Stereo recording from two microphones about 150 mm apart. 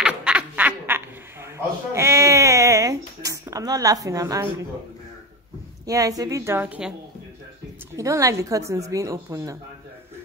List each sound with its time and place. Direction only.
0.0 s quack: 5° right (ahead or behind)
2.0 s a sound: 20° right (ahead or behind)
5.9 s a woman's voice: 25° right (ahead or behind)
7.9 s a woman's voice: 20° right (ahead or behind)